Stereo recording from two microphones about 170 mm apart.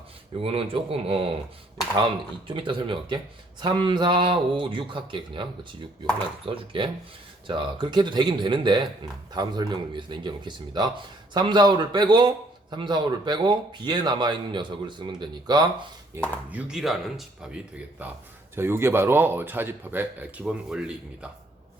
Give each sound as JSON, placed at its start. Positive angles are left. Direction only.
{"t": 0.3, "sound": "speech", "side_deg": -35}
{"t": 2.5, "sound": "speech", "side_deg": -30}
{"t": 16.5, "sound": "a man's voice", "side_deg": -5}